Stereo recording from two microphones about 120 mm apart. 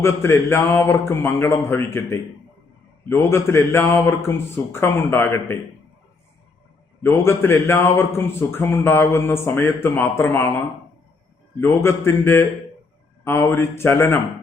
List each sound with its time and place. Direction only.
0.0 s a man's voice: 20° left (ahead or behind)
7.0 s a man's voice: 20° left (ahead or behind)
11.6 s a man's voice: 20° left (ahead or behind)